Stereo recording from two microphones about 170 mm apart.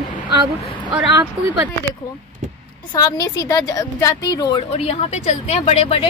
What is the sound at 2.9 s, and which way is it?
Speech, 20° left (ahead or behind).